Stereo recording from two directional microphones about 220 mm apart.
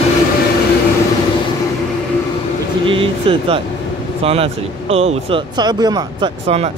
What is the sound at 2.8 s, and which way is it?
Speech, 25° right (ahead or behind).